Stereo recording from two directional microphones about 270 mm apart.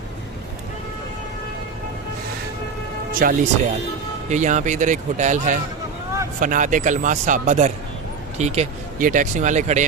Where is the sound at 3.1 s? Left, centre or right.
Right.